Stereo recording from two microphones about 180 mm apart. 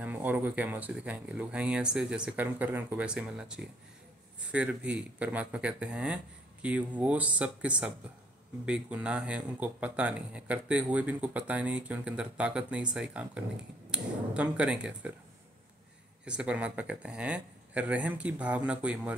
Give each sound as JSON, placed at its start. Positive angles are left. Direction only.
{"t": 0.0, "sound": "speech", "side_deg": -10}
{"t": 16.3, "sound": "speech", "side_deg": -5}